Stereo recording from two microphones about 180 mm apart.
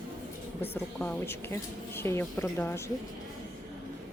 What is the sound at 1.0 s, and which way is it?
Speech, 10° left (ahead or behind).